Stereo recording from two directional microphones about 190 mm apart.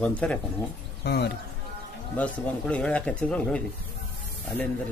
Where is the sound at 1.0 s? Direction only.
60° left (ahead or behind).